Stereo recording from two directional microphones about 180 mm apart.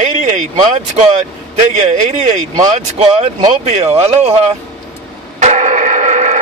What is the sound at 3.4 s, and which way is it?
Speech, 35° right (ahead or behind).